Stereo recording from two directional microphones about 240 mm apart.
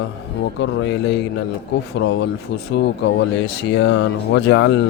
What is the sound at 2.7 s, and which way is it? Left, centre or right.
A man's voice, left.